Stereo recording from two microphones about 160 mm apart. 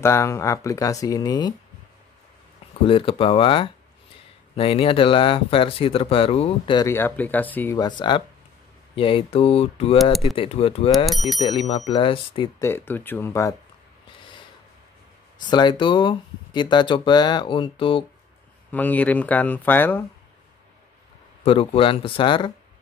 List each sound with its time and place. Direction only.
0.0 s speech: 15° left (ahead or behind)
2.9 s speech: 35° left (ahead or behind)
6.8 s speech: 15° left (ahead or behind)
7.7 s speech: 25° left (ahead or behind)
11.1 s speech: centre (ahead or behind)
11.4 s speech: 40° left (ahead or behind)
12.5 s speech: 15° left (ahead or behind)
15.4 s speech: 30° left (ahead or behind)
18.7 s speech: 10° left (ahead or behind)
21.5 s speech: 35° left (ahead or behind)